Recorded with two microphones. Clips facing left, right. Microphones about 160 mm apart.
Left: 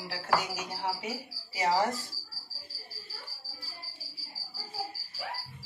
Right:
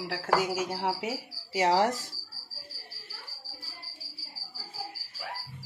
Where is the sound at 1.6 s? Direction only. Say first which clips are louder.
Right 3 dB; 80° right.